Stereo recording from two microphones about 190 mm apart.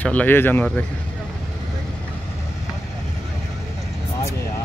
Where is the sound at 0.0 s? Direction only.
10° left (ahead or behind).